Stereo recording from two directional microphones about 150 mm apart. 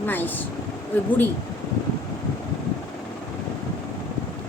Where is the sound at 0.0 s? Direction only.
10° left (ahead or behind).